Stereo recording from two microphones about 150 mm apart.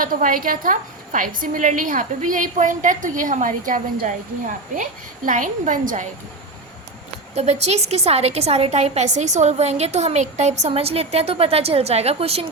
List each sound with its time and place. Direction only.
0.0 s a woman's voice: 65° right (ahead or behind)
7.3 s a woman's voice: 45° right (ahead or behind)